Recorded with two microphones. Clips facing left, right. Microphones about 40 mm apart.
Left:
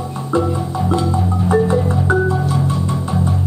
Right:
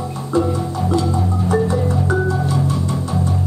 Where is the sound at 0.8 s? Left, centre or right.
Centre.